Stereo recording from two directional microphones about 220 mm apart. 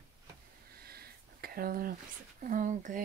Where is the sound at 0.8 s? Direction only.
45° right (ahead or behind).